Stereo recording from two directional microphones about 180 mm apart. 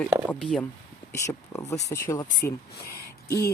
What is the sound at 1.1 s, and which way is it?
Speech, 15° left (ahead or behind).